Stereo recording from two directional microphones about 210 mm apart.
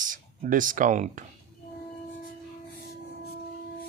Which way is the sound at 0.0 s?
40° right (ahead or behind).